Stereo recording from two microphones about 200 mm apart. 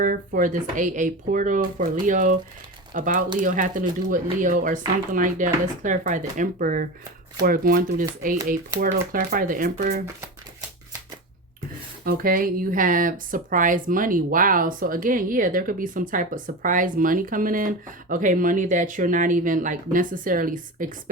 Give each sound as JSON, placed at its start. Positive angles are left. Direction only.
{"t": 0.3, "sound": "speech", "side_deg": -40}
{"t": 12.0, "sound": "speech", "side_deg": -45}